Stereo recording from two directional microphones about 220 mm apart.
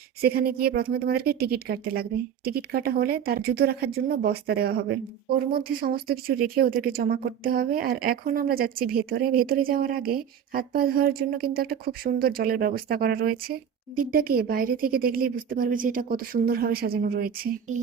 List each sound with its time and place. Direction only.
0.2 s a woman's voice: 45° right (ahead or behind)